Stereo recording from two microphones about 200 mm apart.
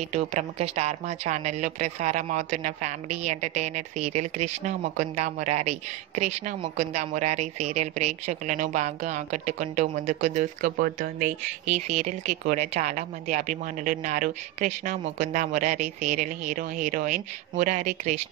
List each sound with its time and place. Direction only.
0.0 s a woman's voice: 35° right (ahead or behind)